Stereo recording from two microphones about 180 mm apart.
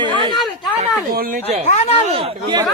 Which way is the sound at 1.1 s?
50° right (ahead or behind).